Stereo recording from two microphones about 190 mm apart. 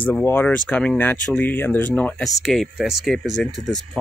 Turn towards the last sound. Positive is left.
turn(degrees=0)  # may be behind; listen again after turning